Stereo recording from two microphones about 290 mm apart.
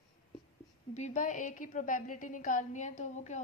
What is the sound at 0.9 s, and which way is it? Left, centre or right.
A woman's voice, left.